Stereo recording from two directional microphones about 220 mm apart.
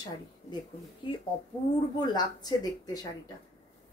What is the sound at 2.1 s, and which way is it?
Speech, 20° left (ahead or behind).